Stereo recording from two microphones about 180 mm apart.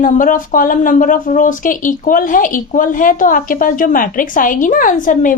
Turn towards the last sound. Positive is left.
turn(degrees=45)  # may be behind; listen again after turning